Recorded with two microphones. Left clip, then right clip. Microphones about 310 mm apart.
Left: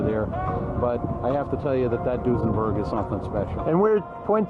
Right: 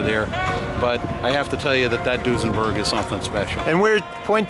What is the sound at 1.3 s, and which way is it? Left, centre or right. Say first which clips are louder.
Speech: right 5 dB; centre.